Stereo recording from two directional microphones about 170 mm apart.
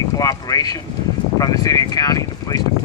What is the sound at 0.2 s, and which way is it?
Speech, 20° left (ahead or behind).